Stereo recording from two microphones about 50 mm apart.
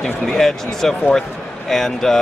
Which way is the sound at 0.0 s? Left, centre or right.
Centre.